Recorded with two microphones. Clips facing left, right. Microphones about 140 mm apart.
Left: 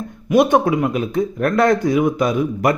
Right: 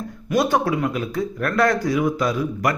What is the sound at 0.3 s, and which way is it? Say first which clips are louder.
Speech: left 5 dB; 20° left (ahead or behind).